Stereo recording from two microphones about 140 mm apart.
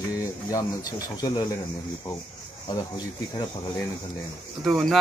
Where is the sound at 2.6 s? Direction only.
30° left (ahead or behind).